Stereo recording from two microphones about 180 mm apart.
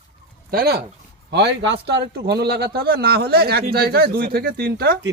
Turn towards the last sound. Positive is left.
turn(degrees=-70)  # may be behind; listen again after turning